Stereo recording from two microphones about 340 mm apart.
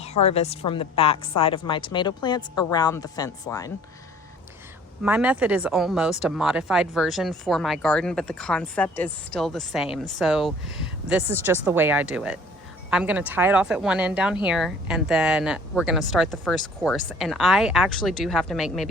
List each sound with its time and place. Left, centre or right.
0.0 s a sound: centre
0.3 s speech: centre
5.0 s speech: centre